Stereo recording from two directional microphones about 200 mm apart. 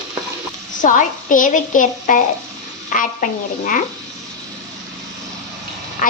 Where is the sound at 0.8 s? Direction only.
40° left (ahead or behind).